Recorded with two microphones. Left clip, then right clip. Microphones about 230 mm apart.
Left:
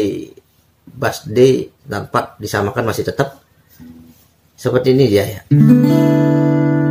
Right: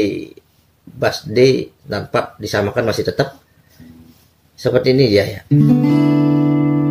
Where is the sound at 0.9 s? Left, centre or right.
Centre.